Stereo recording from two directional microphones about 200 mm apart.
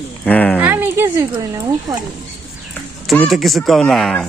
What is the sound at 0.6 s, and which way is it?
Speech, 10° right (ahead or behind).